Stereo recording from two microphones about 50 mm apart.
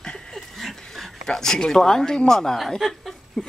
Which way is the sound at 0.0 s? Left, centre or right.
Centre.